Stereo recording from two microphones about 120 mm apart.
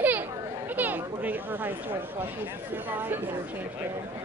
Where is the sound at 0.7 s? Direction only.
15° right (ahead or behind).